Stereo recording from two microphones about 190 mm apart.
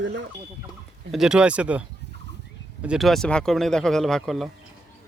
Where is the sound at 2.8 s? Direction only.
Centre (ahead or behind).